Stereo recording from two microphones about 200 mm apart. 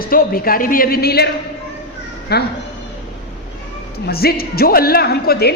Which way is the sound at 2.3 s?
55° left (ahead or behind).